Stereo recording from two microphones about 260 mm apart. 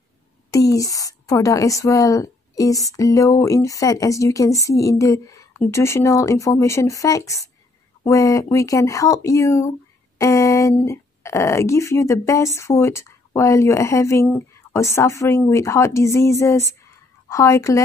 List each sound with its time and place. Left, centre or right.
0.5 s a woman's voice: centre